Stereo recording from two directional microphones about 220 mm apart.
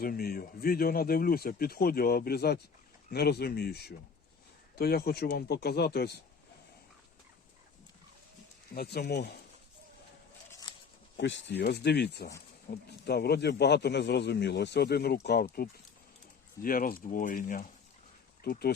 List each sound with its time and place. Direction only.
0.0 s speech: 45° left (ahead or behind)
8.7 s speech: 45° left (ahead or behind)
11.2 s speech: 55° left (ahead or behind)
16.6 s speech: 40° left (ahead or behind)